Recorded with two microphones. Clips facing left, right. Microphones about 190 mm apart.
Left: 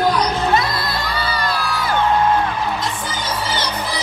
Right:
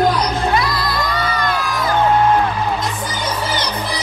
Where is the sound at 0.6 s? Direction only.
25° left (ahead or behind).